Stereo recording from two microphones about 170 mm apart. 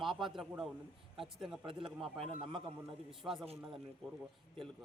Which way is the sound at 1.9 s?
Centre (ahead or behind).